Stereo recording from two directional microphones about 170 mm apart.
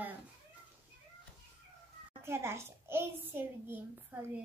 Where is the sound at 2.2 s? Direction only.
15° right (ahead or behind).